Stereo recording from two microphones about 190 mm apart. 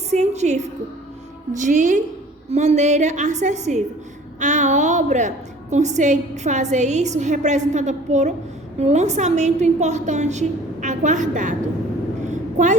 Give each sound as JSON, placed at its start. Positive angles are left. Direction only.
{"t": 0.1, "sound": "a woman's voice", "side_deg": -35}
{"t": 12.3, "sound": "vehicle", "side_deg": -40}